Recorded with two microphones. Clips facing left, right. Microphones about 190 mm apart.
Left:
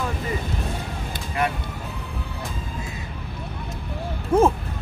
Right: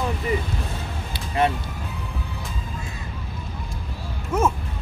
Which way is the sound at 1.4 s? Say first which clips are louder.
Right 4 dB; 25° right (ahead or behind).